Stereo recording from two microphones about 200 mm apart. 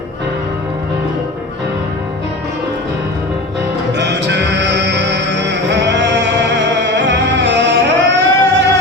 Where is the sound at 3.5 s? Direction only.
60° right (ahead or behind).